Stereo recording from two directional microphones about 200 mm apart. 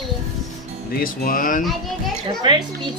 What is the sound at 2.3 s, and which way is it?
Speech, 20° right (ahead or behind).